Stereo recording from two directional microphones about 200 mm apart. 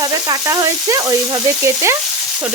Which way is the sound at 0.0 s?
20° right (ahead or behind).